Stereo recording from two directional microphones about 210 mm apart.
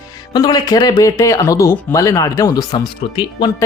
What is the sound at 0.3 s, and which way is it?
Speech, 20° left (ahead or behind).